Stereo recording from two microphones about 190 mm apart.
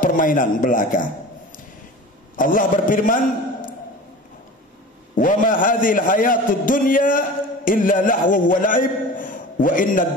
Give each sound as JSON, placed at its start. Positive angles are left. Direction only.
{"t": 0.0, "sound": "a man's voice", "side_deg": 45}
{"t": 2.3, "sound": "a man's voice", "side_deg": 45}
{"t": 5.1, "sound": "a man's voice", "side_deg": 45}